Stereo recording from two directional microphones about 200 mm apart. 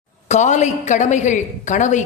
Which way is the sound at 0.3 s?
35° left (ahead or behind).